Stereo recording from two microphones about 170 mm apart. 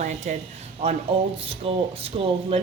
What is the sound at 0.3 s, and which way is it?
Speech, 45° right (ahead or behind).